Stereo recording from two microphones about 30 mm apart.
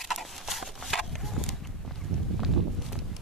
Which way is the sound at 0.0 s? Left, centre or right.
Centre.